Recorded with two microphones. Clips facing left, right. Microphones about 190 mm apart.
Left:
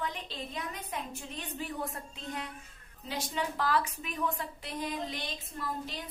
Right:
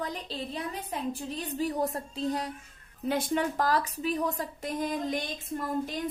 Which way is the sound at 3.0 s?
55° right (ahead or behind).